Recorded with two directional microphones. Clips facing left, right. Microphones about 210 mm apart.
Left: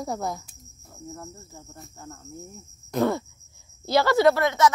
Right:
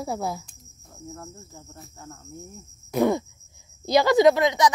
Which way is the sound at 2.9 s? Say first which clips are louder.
Right 2 dB; 15° right (ahead or behind).